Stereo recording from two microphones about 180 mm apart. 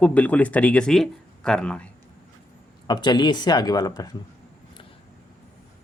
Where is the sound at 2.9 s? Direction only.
25° left (ahead or behind).